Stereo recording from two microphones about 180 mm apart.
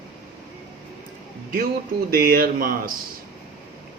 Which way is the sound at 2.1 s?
50° right (ahead or behind).